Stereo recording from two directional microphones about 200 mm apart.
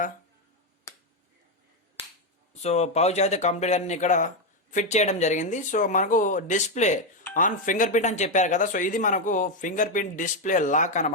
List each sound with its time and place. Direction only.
2.6 s speech: 35° left (ahead or behind)